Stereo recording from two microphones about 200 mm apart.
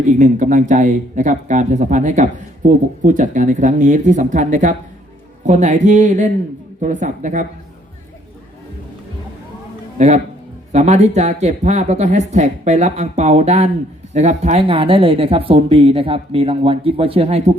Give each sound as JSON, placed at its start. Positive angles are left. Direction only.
{"t": 0.1, "sound": "speech", "side_deg": -40}
{"t": 10.0, "sound": "speech", "side_deg": -35}